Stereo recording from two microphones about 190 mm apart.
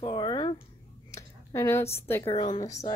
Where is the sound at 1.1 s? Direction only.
15° left (ahead or behind).